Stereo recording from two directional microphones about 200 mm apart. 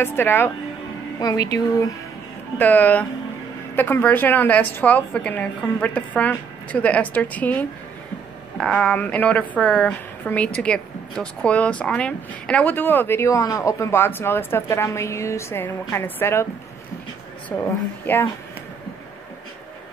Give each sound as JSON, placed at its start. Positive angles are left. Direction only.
{"t": 0.0, "sound": "a woman's voice", "side_deg": 10}
{"t": 17.5, "sound": "speech", "side_deg": 10}